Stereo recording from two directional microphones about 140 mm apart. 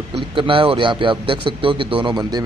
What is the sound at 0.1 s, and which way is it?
A man's voice, 40° right (ahead or behind).